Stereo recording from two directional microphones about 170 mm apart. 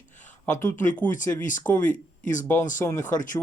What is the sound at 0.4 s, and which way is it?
Speech, 15° left (ahead or behind).